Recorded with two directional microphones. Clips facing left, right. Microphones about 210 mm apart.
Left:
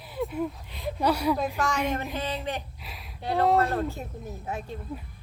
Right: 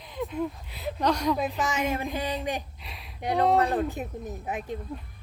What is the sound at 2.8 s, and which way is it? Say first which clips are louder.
Speech: left 1 dB; centre (ahead or behind).